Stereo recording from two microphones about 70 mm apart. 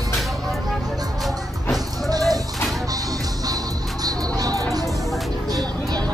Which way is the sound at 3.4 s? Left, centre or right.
Right.